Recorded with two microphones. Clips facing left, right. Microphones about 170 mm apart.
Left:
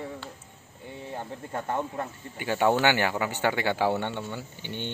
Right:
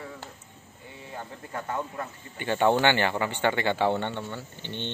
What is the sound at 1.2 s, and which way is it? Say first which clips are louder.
Speech: left 1 dB; 25° left (ahead or behind).